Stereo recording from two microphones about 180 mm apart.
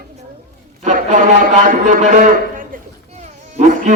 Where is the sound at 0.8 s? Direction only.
45° right (ahead or behind).